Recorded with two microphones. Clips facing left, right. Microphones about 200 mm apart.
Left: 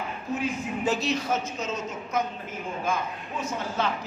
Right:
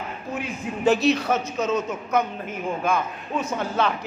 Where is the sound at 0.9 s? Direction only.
65° right (ahead or behind).